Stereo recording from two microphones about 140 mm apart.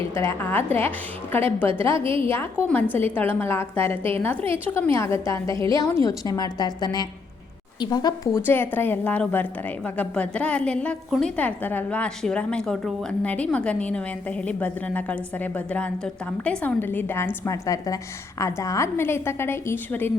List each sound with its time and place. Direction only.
0.0 s a woman's voice: 20° left (ahead or behind)
2.0 s a woman's voice: 40° right (ahead or behind)
2.3 s a woman's voice: 15° left (ahead or behind)
8.4 s a woman's voice: 15° left (ahead or behind)